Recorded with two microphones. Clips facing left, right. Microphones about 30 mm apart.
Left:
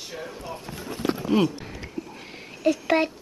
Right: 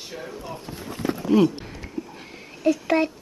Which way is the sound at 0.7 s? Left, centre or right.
Left.